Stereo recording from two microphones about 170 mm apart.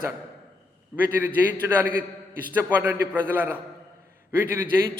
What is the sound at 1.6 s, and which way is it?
A man's voice, 10° right (ahead or behind).